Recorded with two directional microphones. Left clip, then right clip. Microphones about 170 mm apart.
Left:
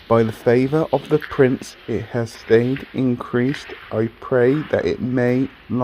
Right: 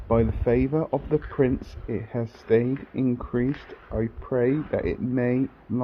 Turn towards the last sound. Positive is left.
turn(degrees=25)  # may be behind; listen again after turning